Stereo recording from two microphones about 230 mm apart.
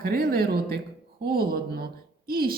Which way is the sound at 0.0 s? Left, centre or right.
Right.